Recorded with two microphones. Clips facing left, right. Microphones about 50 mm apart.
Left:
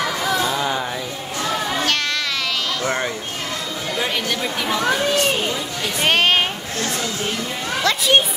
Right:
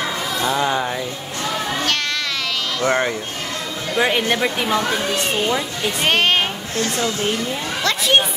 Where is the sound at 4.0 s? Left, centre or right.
Right.